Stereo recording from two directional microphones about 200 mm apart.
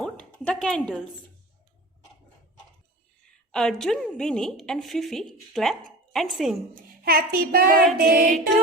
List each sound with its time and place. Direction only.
0.0 s speech: 5° left (ahead or behind)
3.5 s a woman's voice: centre (ahead or behind)
7.0 s child singing: 50° right (ahead or behind)